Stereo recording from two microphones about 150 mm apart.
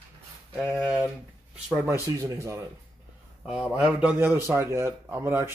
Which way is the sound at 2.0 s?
20° right (ahead or behind).